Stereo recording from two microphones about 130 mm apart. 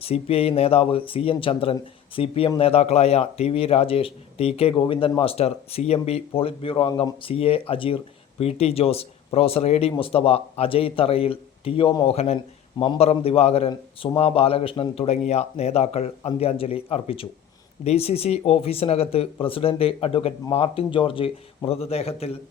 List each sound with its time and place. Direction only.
0.0 s speech: 50° left (ahead or behind)
12.1 s speech: 50° left (ahead or behind)